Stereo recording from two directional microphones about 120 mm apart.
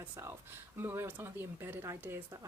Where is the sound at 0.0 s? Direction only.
20° right (ahead or behind).